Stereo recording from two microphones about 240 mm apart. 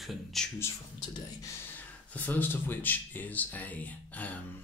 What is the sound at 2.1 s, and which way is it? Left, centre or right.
Speech, centre.